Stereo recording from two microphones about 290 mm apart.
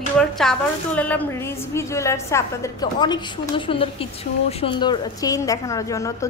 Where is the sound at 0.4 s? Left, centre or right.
Centre.